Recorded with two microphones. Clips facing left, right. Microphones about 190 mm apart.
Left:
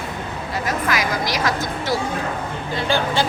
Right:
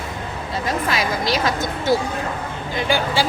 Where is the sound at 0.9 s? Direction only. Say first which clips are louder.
Right 1 dB; 25° right (ahead or behind).